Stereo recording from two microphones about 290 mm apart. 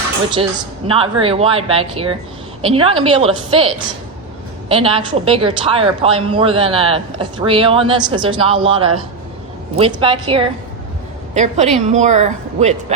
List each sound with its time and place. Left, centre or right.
0.9 s a woman's voice: centre
4.7 s a woman's voice: centre